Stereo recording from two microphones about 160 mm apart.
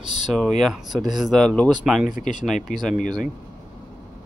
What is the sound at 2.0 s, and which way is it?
Speech, 55° left (ahead or behind).